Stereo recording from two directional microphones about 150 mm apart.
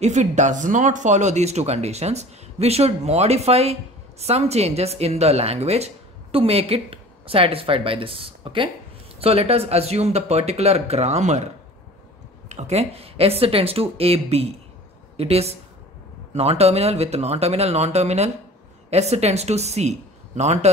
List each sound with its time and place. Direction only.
0.0 s speech: 50° right (ahead or behind)
12.4 s speech: 45° right (ahead or behind)